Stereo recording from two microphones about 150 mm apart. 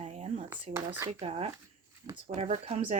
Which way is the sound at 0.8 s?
15° right (ahead or behind).